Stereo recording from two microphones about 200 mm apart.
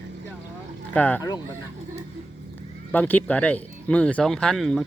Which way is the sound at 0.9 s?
10° left (ahead or behind).